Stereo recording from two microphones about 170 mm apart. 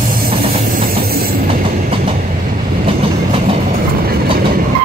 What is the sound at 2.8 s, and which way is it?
Train, 35° right (ahead or behind).